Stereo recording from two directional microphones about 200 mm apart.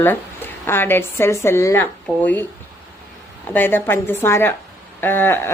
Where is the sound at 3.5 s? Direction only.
10° left (ahead or behind).